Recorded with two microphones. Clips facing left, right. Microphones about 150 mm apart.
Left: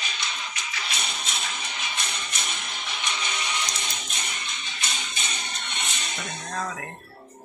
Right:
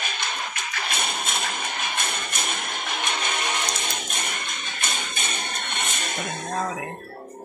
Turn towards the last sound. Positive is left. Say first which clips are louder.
# right 4 dB
turn(degrees=-50)  # may be behind; listen again after turning